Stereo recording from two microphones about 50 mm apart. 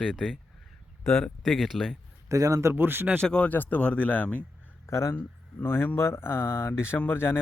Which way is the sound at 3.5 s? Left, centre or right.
Left.